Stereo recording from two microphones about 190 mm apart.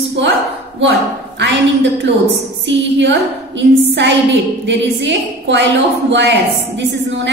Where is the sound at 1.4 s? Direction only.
70° right (ahead or behind).